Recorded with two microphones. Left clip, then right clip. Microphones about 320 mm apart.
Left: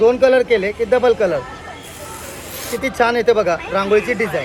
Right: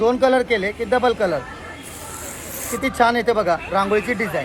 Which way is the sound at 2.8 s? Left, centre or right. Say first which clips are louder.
Left 2 dB; centre.